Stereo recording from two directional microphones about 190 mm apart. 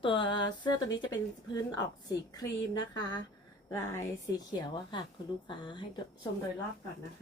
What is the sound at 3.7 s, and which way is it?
A woman's voice, 15° left (ahead or behind).